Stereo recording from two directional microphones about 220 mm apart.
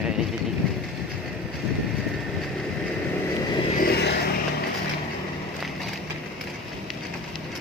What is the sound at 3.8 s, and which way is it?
Vehicle, 50° left (ahead or behind).